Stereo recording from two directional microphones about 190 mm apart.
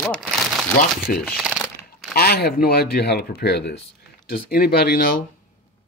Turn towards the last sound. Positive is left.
turn(degrees=50)  # may be behind; listen again after turning